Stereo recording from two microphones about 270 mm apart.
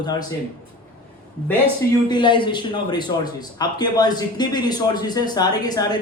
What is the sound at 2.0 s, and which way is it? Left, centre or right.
A man's voice, centre.